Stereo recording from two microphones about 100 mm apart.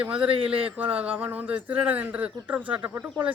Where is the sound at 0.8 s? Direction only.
15° right (ahead or behind).